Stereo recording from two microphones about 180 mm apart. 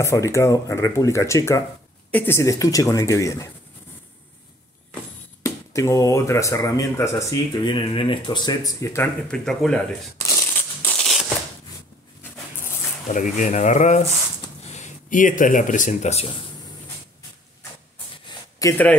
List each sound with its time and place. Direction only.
0.0 s speech: 15° left (ahead or behind)
5.4 s speech: 15° left (ahead or behind)
10.1 s a sound: 15° left (ahead or behind)
13.1 s speech: 45° left (ahead or behind)
18.6 s speech: 15° left (ahead or behind)